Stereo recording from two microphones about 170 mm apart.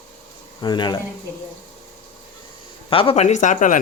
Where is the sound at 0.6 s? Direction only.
25° left (ahead or behind).